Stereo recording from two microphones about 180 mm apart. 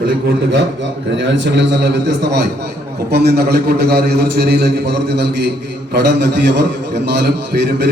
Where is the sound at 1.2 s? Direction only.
75° right (ahead or behind).